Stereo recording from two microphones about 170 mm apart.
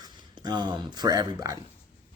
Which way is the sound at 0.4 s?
25° right (ahead or behind).